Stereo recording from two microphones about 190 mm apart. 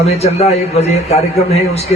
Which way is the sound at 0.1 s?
35° left (ahead or behind).